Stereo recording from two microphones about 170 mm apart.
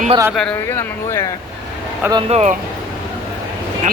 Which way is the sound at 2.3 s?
45° right (ahead or behind).